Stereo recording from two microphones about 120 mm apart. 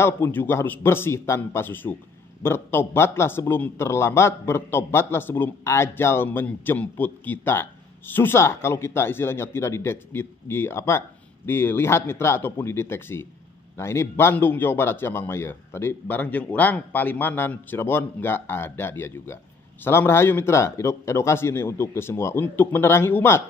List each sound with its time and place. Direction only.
0.0 s a man's voice: 20° left (ahead or behind)